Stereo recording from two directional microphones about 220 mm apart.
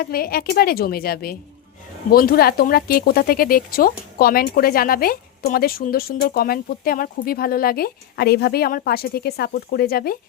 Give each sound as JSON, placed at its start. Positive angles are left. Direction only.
{"t": 0.0, "sound": "speech", "side_deg": 45}